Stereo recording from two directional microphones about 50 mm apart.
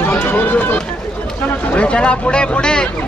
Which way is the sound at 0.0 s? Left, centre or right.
Left.